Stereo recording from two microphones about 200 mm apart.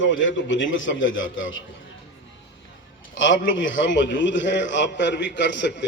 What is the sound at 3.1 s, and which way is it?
A man's voice, 70° left (ahead or behind).